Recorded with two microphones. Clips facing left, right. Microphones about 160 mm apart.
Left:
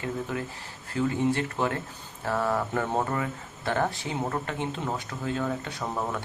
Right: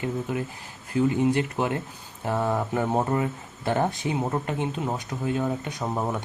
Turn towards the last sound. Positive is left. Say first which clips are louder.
# right 3 dB
turn(degrees=-20)  # may be behind; listen again after turning